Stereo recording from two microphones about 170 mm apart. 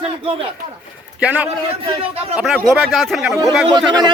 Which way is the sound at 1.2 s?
10° right (ahead or behind).